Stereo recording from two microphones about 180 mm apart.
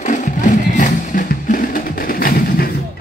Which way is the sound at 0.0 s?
45° left (ahead or behind).